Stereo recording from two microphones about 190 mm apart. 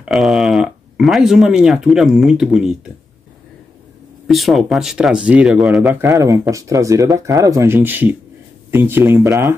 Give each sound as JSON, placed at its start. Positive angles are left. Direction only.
{"t": 0.0, "sound": "speech", "side_deg": 0}
{"t": 4.3, "sound": "speech", "side_deg": 0}
{"t": 5.9, "sound": "speech", "side_deg": -15}